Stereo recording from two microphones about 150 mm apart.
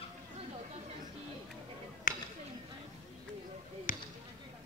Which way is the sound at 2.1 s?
70° left (ahead or behind).